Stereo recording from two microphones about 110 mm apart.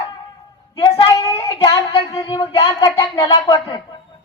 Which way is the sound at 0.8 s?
40° left (ahead or behind).